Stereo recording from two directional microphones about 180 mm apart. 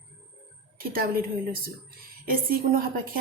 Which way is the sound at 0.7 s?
55° right (ahead or behind).